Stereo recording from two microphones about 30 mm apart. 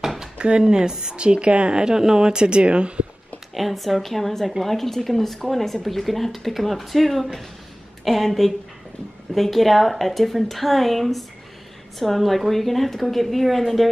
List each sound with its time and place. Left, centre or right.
0.4 s speech: right
1.1 s a woman's voice: right
1.7 s speech: right
2.0 s speech: centre; by 3.1 s right
3.5 s a woman's voice: centre